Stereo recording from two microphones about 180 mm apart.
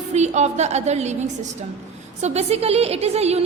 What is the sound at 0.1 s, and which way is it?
A woman's voice, 40° right (ahead or behind).